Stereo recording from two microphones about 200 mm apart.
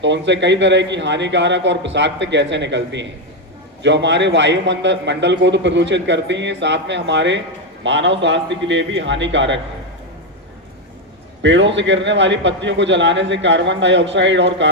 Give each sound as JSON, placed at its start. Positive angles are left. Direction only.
{"t": 0.0, "sound": "a man's voice", "side_deg": -65}
{"t": 11.4, "sound": "a man's voice", "side_deg": -65}